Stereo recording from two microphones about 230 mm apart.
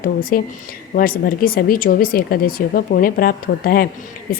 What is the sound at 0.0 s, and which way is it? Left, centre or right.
Speech, left.